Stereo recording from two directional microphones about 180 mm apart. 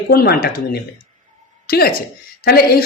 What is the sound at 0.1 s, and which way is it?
A woman's voice, 60° left (ahead or behind).